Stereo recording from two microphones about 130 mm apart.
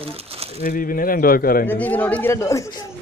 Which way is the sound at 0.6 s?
90° left.